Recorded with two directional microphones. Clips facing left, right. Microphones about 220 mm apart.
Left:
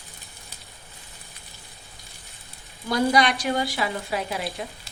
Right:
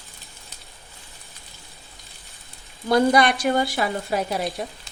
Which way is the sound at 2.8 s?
55° right (ahead or behind).